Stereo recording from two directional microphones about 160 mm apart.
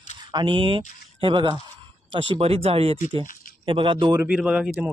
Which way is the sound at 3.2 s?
60° left (ahead or behind).